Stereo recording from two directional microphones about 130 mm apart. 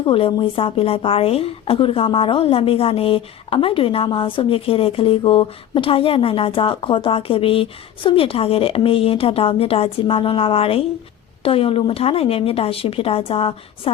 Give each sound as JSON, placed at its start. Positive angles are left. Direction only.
{"t": 0.0, "sound": "a woman's voice", "side_deg": 45}